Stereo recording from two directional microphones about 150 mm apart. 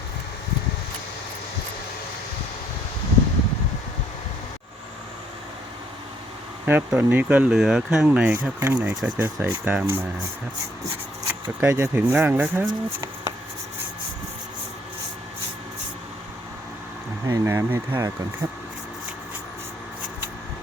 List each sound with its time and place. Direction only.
6.7 s speech: 10° right (ahead or behind)
11.6 s speech: 15° right (ahead or behind)
17.2 s speech: 20° right (ahead or behind)